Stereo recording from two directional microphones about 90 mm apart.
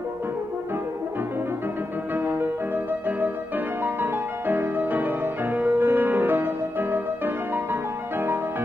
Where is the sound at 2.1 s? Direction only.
25° right (ahead or behind).